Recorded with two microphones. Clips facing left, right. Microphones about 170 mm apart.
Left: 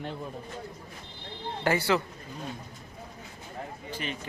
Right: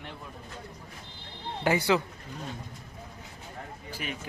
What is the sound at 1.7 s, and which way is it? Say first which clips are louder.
Speech: right 1 dB; 15° right (ahead or behind).